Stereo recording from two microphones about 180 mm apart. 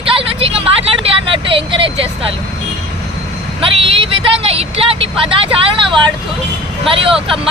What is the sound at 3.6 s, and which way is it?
Speech, 30° right (ahead or behind).